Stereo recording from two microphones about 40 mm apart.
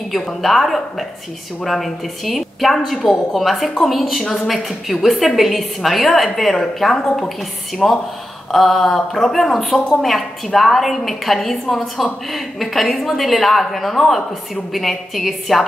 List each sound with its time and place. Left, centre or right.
0.4 s a woman's voice: centre
9.8 s a woman's voice: centre
10.0 s a woman's voice: centre